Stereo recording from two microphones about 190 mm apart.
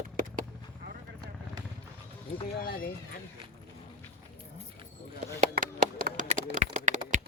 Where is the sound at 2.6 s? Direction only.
55° left (ahead or behind).